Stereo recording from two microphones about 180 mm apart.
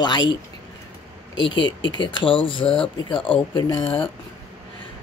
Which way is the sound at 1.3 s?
90° left.